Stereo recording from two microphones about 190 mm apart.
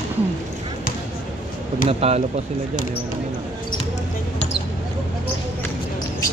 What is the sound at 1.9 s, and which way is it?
Speech, 35° right (ahead or behind).